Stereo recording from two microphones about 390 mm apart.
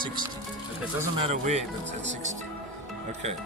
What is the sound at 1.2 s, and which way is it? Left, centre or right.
Speech, centre.